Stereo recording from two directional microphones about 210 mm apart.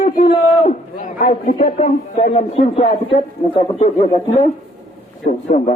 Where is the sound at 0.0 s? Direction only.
25° left (ahead or behind).